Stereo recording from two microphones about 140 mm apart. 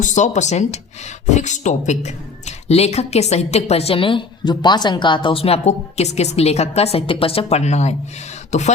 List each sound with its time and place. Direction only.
0.0 s a woman's voice: 60° left (ahead or behind)